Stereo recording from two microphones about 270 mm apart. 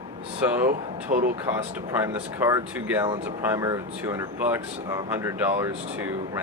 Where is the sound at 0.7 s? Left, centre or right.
Right.